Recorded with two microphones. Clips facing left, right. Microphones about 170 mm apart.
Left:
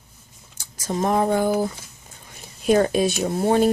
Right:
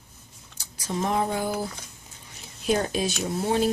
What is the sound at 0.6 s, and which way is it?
Speech, 45° left (ahead or behind).